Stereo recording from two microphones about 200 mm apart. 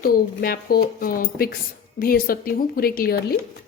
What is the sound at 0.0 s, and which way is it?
A woman's voice, 50° left (ahead or behind).